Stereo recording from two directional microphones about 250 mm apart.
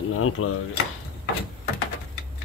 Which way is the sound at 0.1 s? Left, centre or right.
Left.